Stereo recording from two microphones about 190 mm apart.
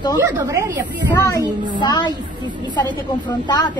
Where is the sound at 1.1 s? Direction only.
15° left (ahead or behind).